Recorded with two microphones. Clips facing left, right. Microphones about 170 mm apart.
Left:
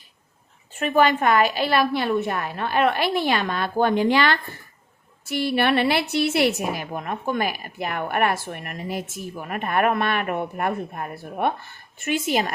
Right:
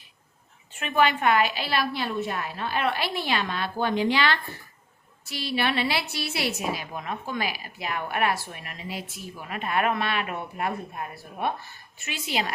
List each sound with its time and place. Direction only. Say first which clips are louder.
0.7 s a woman's voice: left 4 dB; 40° left (ahead or behind)